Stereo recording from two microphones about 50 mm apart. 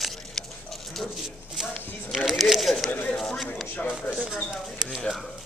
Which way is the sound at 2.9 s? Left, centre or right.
Left.